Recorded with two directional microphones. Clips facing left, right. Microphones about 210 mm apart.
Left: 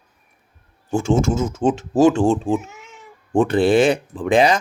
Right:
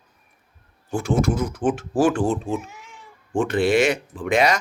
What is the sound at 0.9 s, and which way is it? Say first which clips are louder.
Speech: left 3 dB; 25° left (ahead or behind).